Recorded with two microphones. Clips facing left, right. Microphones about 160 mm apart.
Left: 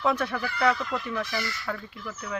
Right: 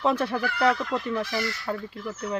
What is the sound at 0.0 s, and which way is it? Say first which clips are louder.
Speech: right 2 dB; 30° right (ahead or behind).